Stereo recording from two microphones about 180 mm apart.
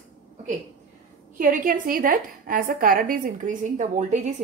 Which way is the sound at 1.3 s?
50° right (ahead or behind).